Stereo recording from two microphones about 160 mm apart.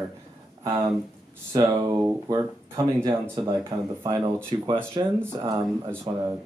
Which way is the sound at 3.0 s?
30° right (ahead or behind).